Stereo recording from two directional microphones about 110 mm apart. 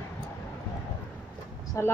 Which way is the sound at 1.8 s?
25° left (ahead or behind).